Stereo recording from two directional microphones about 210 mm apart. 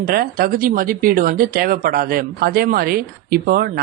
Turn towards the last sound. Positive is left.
turn(degrees=-45)  # may be behind; listen again after turning